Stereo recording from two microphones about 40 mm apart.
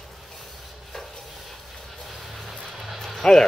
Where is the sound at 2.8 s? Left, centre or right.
Centre.